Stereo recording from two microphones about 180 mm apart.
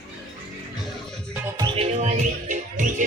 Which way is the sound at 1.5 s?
30° right (ahead or behind).